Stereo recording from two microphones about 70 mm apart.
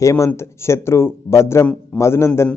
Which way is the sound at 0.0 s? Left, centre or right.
Left.